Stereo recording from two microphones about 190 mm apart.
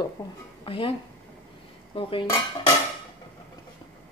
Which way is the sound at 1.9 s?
30° left (ahead or behind).